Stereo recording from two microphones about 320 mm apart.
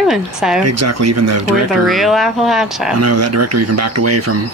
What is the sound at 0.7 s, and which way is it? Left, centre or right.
Speech, right.